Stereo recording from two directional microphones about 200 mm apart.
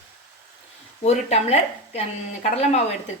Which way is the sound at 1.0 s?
35° left (ahead or behind).